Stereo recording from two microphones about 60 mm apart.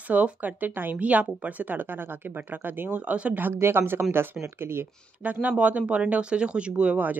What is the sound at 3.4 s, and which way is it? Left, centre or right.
A woman's voice, right.